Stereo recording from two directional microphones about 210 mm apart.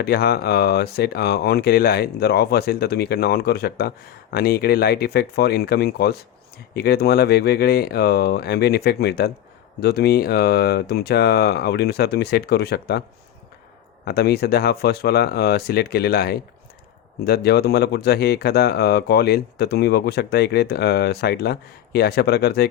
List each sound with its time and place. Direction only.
0.0 s speech: 50° left (ahead or behind)
14.0 s speech: 50° left (ahead or behind)